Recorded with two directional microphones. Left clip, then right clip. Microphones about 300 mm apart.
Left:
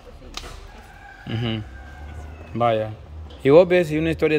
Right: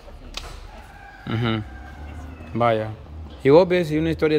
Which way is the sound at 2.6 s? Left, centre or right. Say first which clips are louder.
Even; centre.